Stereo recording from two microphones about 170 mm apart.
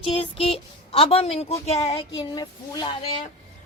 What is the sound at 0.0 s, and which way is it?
Speech, 35° left (ahead or behind).